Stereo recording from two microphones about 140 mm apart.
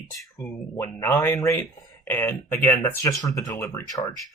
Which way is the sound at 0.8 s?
20° left (ahead or behind).